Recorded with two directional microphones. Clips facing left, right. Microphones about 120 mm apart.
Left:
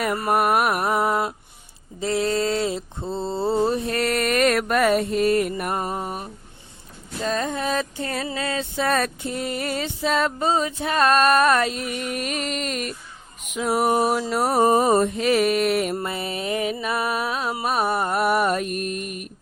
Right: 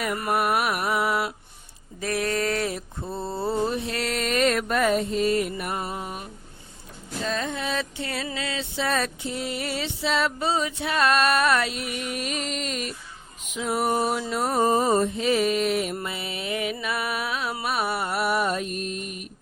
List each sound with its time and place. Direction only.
0.2 s mantra: 45° left (ahead or behind)
2.0 s mantra: 25° left (ahead or behind)
3.8 s music: 50° left (ahead or behind)
7.3 s music: 40° left (ahead or behind)